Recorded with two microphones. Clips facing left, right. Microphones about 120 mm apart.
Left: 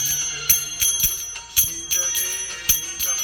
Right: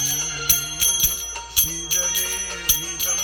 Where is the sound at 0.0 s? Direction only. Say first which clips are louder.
Right 5 dB; 45° right (ahead or behind).